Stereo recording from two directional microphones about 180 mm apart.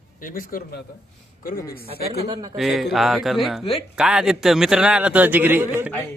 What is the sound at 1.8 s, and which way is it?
Speech, 35° right (ahead or behind).